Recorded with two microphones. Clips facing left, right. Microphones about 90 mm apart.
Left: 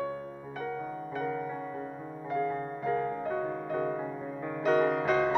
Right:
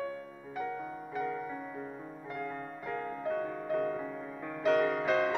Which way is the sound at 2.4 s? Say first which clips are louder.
Left 8 dB; 25° left (ahead or behind).